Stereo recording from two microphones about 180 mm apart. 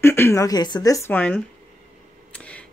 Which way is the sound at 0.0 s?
15° left (ahead or behind).